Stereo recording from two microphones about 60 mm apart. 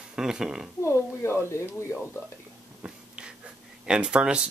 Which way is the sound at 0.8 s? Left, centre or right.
Left.